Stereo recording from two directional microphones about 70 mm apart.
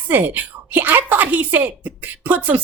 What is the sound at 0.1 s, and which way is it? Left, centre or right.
Speech, right.